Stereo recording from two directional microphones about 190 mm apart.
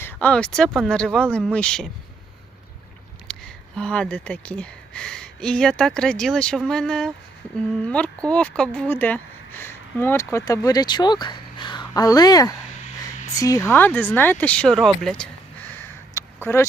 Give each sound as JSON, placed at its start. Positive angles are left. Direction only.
{"t": 0.0, "sound": "speech", "side_deg": 10}
{"t": 3.2, "sound": "speech", "side_deg": 5}
{"t": 16.1, "sound": "a sound", "side_deg": 15}